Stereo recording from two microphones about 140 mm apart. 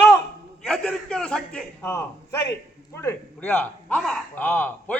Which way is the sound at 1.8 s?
20° left (ahead or behind).